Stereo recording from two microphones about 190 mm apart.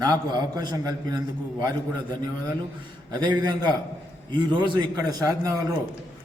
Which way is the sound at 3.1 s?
20° right (ahead or behind).